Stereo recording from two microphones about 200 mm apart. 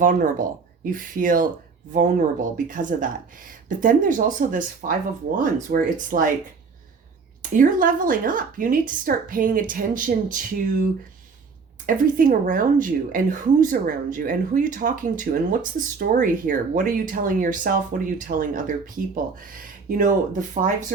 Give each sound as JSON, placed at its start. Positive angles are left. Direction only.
{"t": 0.0, "sound": "speech", "side_deg": -40}
{"t": 7.5, "sound": "speech", "side_deg": -40}
{"t": 11.9, "sound": "speech", "side_deg": -45}